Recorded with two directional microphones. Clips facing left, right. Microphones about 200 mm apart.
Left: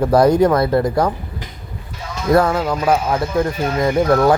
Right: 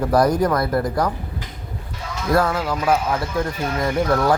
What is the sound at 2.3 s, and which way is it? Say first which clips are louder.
Speech: left 5 dB; 25° left (ahead or behind).